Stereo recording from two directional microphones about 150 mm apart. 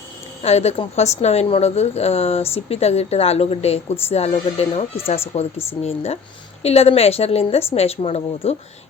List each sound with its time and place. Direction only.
0.4 s a woman's voice: 45° left (ahead or behind)